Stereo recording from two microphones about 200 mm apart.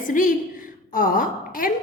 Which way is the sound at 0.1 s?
40° left (ahead or behind).